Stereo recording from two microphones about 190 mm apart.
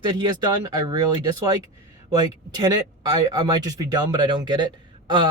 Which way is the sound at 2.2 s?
25° right (ahead or behind).